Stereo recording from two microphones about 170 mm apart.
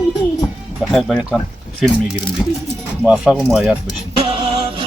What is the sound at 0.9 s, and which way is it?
Speech, centre (ahead or behind).